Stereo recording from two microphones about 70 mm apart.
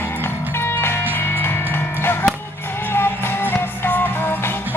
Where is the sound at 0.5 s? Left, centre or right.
Left.